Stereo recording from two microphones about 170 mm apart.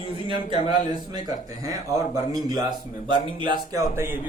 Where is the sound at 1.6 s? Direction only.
20° right (ahead or behind).